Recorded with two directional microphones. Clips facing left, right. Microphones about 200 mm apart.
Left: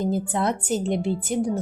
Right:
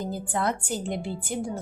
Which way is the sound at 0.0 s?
20° left (ahead or behind).